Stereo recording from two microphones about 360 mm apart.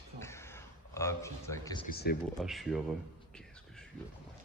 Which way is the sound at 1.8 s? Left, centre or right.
Left.